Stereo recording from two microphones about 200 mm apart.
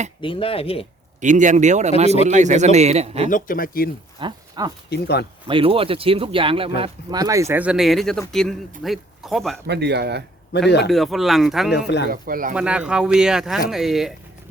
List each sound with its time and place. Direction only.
0.2 s speech: 25° left (ahead or behind)
1.2 s a man's voice: 40° right (ahead or behind)
3.2 s speech: 40° left (ahead or behind)
4.2 s speech: 20° right (ahead or behind)
4.9 s speech: 55° left (ahead or behind)
5.5 s speech: 25° right (ahead or behind); by 9.6 s centre (ahead or behind)
9.6 s speech: 55° right (ahead or behind)
10.5 s speech: 55° left (ahead or behind)
10.8 s speech: centre (ahead or behind)
12.1 s speech: 45° right (ahead or behind)
12.5 s speech: 5° right (ahead or behind)